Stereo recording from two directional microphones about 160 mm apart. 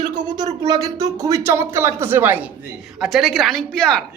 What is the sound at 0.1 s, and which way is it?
Speech, 25° right (ahead or behind).